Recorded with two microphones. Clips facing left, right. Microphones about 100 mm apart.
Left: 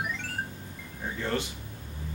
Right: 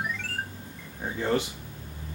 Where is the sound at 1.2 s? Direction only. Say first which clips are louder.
Right 5 dB; 20° right (ahead or behind).